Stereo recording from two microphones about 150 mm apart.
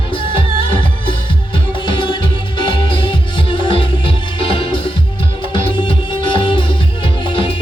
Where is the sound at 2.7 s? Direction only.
35° left (ahead or behind).